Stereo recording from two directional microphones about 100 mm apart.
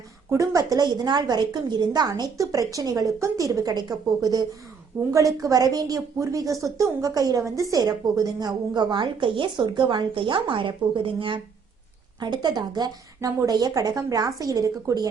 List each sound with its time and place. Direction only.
0.3 s a woman's voice: 35° right (ahead or behind); by 11.3 s 60° right (ahead or behind)
12.2 s a woman's voice: 45° right (ahead or behind)